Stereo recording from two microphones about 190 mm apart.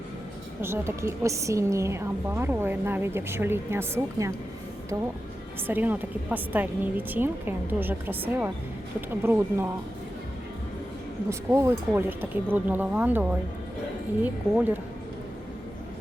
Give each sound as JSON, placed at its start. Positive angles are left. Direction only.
{"t": 0.6, "sound": "a woman's voice", "side_deg": -15}
{"t": 5.6, "sound": "a woman's voice", "side_deg": -10}
{"t": 11.3, "sound": "a woman's voice", "side_deg": -15}